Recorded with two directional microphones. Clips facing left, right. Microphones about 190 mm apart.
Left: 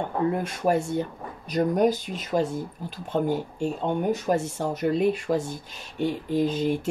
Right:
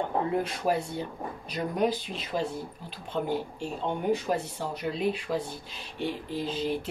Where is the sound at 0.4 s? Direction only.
45° left (ahead or behind).